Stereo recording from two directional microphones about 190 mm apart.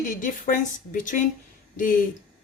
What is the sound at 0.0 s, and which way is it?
Speech, 45° left (ahead or behind).